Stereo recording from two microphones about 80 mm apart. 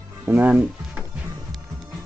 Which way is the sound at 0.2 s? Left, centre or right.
Right.